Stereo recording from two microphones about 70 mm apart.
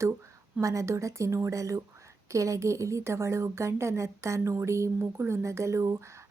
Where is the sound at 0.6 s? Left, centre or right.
Right.